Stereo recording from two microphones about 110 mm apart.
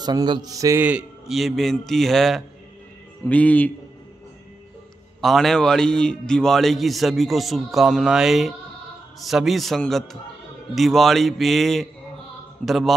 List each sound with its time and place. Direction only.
0.0 s a man's voice: 40° right (ahead or behind)
0.7 s a man's voice: 15° right (ahead or behind)
1.2 s a man's voice: centre (ahead or behind)
3.3 s speech: 15° left (ahead or behind)
5.2 s a man's voice: centre (ahead or behind)